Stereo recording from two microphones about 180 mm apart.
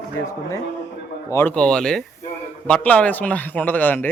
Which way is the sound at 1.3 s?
15° left (ahead or behind).